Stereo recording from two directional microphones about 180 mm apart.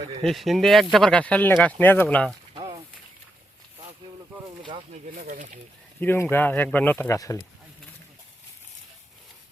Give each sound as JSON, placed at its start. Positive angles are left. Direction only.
{"t": 0.2, "sound": "speech", "side_deg": 0}
{"t": 4.6, "sound": "a sound", "side_deg": -25}
{"t": 5.1, "sound": "speech", "side_deg": -50}
{"t": 6.0, "sound": "speech", "side_deg": 10}